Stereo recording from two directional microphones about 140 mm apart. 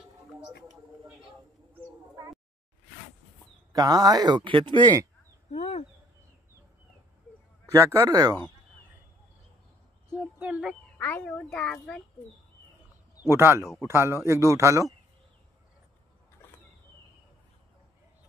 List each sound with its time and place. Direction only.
3.7 s a man's voice: 25° right (ahead or behind)
5.5 s a sound: 45° left (ahead or behind)
7.7 s a man's voice: 20° right (ahead or behind)
10.1 s speech: 10° right (ahead or behind)
10.7 s a child's voice: 10° left (ahead or behind)
13.3 s a man's voice: 15° right (ahead or behind)